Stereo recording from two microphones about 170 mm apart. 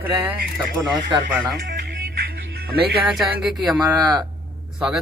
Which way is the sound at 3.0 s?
Centre (ahead or behind).